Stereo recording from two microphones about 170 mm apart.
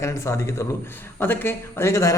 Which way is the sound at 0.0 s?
15° left (ahead or behind).